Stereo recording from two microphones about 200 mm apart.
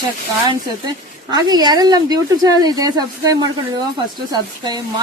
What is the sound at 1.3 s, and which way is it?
A woman's voice, 20° right (ahead or behind).